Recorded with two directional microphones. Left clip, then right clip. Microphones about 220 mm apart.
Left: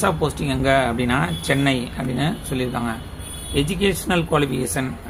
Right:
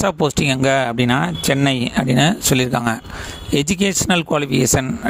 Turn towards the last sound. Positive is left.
turn(degrees=-50)  # may be behind; listen again after turning